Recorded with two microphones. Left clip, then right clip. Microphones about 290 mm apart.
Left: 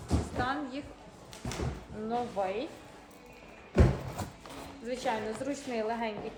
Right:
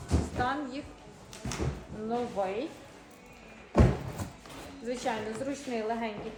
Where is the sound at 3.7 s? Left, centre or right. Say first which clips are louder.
Right 2 dB; centre.